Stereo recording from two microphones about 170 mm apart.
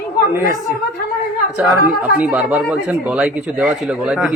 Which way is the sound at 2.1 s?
10° right (ahead or behind).